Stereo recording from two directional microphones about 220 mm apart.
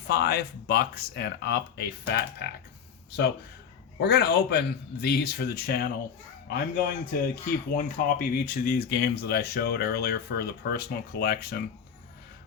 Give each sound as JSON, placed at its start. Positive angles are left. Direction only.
{"t": 0.1, "sound": "speech", "side_deg": 45}
{"t": 4.0, "sound": "speech", "side_deg": 50}